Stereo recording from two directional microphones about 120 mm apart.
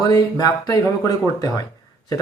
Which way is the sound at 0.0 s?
30° left (ahead or behind).